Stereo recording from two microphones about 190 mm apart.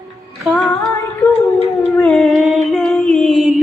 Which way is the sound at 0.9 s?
15° left (ahead or behind).